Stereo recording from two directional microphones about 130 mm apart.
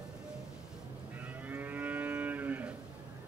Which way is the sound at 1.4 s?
15° right (ahead or behind).